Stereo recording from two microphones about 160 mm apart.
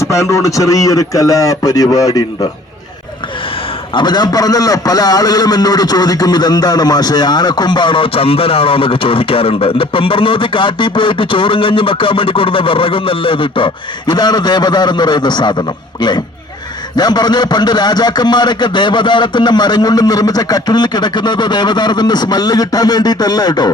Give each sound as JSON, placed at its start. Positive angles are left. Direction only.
{"t": 0.0, "sound": "a man's voice", "side_deg": 20}
{"t": 3.9, "sound": "a man's voice", "side_deg": 25}